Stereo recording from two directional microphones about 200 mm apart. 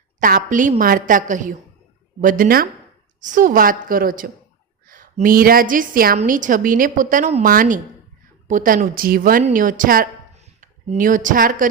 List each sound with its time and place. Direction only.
0.2 s a woman's voice: 45° right (ahead or behind)